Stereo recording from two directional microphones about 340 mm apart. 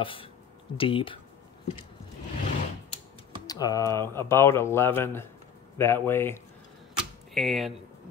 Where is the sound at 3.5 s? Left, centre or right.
Centre.